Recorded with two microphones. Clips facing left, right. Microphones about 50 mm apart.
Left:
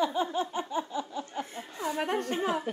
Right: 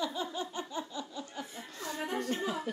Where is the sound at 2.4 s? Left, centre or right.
Left.